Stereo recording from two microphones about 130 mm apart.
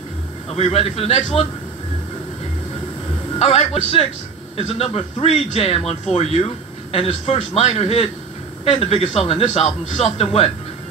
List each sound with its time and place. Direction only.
0.5 s speech: 50° left (ahead or behind)
3.3 s speech: 50° left (ahead or behind)